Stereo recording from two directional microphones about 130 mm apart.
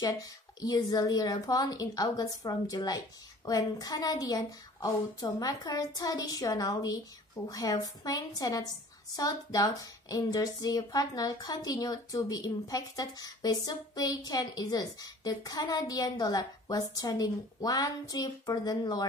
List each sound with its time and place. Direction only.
0.6 s speech: 30° left (ahead or behind)